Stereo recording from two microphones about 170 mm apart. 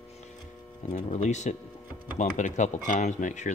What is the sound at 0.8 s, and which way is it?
Speech, 45° left (ahead or behind).